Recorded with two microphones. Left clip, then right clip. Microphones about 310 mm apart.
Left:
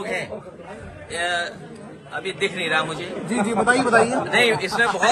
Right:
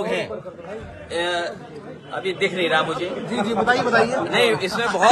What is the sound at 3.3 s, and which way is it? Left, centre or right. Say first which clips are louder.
Speech: left 1 dB; left.